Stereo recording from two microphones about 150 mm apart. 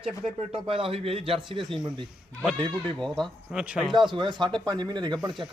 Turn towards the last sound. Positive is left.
turn(degrees=-30)  # may be behind; listen again after turning